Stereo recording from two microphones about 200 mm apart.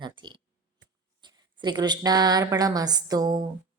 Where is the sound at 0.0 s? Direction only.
20° right (ahead or behind).